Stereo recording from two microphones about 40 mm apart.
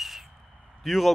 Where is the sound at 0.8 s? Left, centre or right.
Centre.